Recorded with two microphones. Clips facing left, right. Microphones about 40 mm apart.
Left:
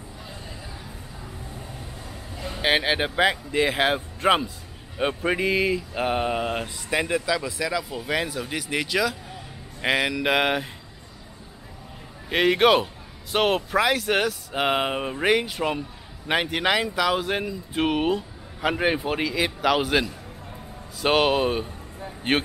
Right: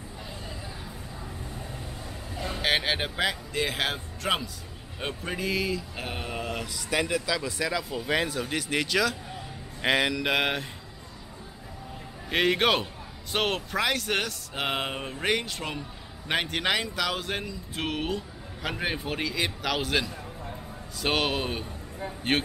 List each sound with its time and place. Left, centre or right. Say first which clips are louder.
2.3 s vehicle: right 1 dB; centre
2.6 s speech: left 5 dB; centre; by 6.8 s left
6.9 s speech: left 3 dB; centre
7.3 s speech: left 3 dB; centre
12.3 s speech: left 5 dB; centre